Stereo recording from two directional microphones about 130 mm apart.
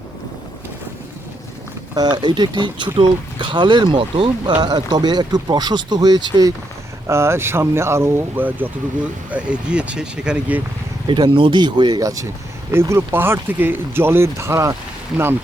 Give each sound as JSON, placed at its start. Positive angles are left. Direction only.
{"t": 2.0, "sound": "speech", "side_deg": -35}
{"t": 7.1, "sound": "speech", "side_deg": -20}
{"t": 11.0, "sound": "speech", "side_deg": -35}